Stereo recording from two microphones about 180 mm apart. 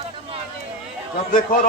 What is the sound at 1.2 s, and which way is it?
Speech, 55° left (ahead or behind).